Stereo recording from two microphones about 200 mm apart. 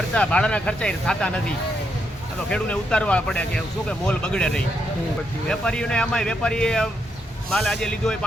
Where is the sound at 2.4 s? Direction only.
5° left (ahead or behind).